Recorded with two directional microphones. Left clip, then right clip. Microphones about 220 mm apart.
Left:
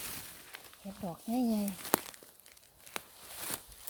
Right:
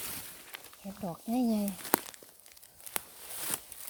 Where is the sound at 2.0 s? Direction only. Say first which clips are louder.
Right 1 dB; 10° right (ahead or behind).